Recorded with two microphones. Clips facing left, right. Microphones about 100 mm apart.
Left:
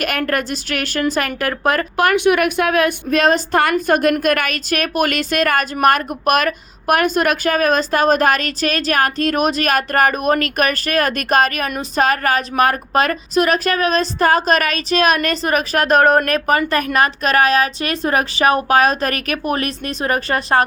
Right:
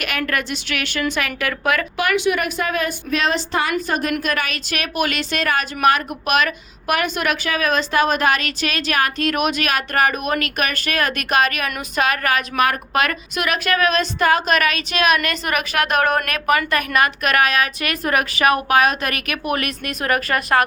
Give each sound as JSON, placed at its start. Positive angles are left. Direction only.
{"t": 0.0, "sound": "a woman's voice", "side_deg": 45}